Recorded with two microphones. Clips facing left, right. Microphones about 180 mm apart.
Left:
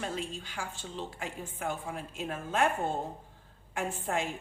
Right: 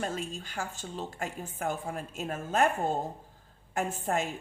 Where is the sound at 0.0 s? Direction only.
45° right (ahead or behind).